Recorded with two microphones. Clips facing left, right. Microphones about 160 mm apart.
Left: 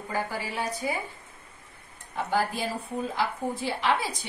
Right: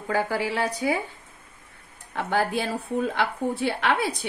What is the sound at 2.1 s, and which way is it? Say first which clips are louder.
Speech: right 3 dB; 70° right (ahead or behind).